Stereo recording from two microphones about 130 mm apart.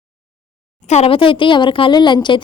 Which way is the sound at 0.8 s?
55° left (ahead or behind).